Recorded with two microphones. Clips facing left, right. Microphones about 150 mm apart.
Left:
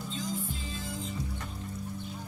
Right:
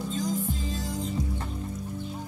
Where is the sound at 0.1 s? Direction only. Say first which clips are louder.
Right 6 dB; 45° right (ahead or behind).